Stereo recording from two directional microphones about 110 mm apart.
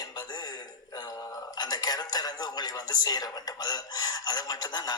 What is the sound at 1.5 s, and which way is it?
Speech, 40° left (ahead or behind).